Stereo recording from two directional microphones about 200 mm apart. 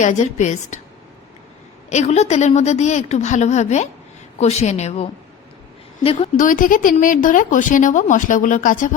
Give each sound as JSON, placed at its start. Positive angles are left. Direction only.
{"t": 0.0, "sound": "a woman's voice", "side_deg": 35}
{"t": 1.9, "sound": "a woman's voice", "side_deg": 35}